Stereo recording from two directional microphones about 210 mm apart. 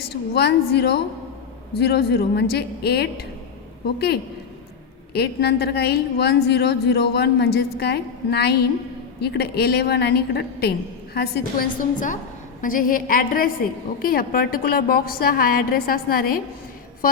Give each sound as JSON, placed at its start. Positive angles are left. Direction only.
{"t": 0.1, "sound": "a woman's voice", "side_deg": 50}